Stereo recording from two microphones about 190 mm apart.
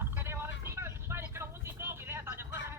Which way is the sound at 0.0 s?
10° right (ahead or behind).